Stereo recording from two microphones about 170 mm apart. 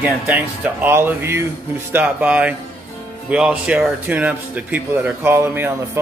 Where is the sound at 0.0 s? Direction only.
10° right (ahead or behind).